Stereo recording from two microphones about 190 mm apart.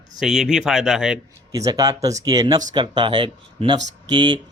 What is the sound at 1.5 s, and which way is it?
Speech, 20° right (ahead or behind).